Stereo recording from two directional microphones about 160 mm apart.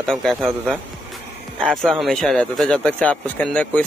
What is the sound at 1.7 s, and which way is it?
Speech, centre (ahead or behind).